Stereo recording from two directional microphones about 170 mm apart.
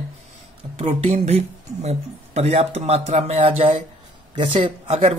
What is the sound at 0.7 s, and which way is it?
Speech, 35° right (ahead or behind).